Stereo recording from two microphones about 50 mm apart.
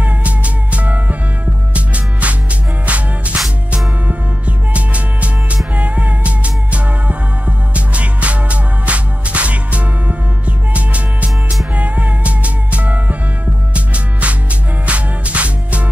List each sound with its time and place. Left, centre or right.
0.0 s music: right